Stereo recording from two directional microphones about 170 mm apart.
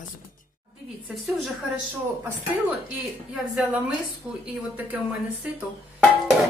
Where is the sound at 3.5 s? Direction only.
5° right (ahead or behind).